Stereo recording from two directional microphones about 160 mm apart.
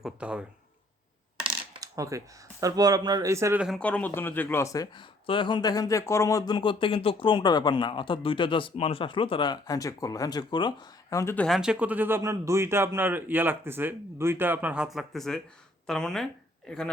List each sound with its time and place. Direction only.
0.0 s a man's voice: 5° right (ahead or behind)
1.5 s coin: 30° right (ahead or behind)
2.0 s speech: 20° right (ahead or behind)
3.8 s speech: 10° left (ahead or behind)
11.4 s a man's voice: centre (ahead or behind)